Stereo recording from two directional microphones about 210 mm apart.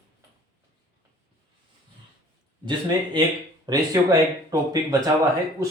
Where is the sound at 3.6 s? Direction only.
20° right (ahead or behind).